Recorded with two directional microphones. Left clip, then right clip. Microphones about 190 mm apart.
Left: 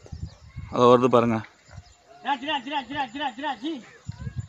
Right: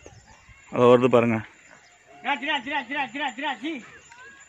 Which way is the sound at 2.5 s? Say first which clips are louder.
Right 1 dB; 60° right (ahead or behind).